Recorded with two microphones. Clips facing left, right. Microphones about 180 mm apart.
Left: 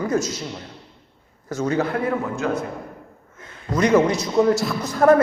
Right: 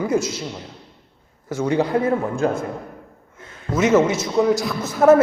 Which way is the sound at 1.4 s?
10° right (ahead or behind).